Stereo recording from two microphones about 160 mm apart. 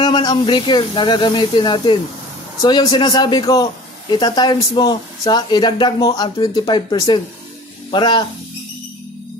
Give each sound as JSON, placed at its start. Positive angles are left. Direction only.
{"t": 0.0, "sound": "speech", "side_deg": 25}